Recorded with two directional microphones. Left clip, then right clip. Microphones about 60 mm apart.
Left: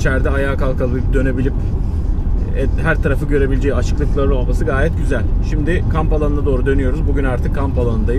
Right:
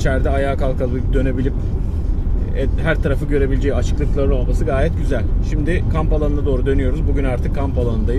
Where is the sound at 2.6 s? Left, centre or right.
Left.